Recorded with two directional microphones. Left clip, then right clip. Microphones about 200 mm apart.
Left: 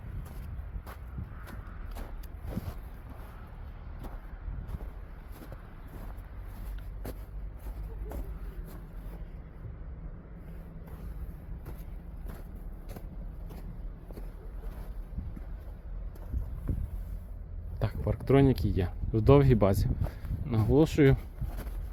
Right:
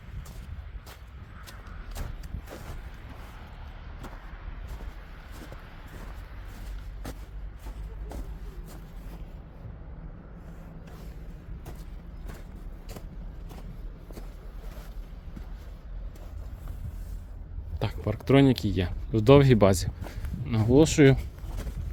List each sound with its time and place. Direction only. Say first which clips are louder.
17.7 s speech: right 3 dB; 20° right (ahead or behind)